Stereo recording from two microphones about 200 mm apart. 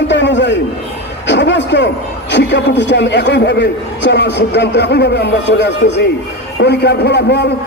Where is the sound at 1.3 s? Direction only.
60° left (ahead or behind).